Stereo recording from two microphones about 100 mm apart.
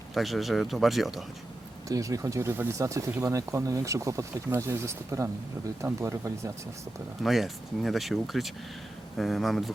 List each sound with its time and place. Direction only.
0.1 s speech: centre (ahead or behind)
1.9 s speech: 35° right (ahead or behind)
7.2 s speech: centre (ahead or behind)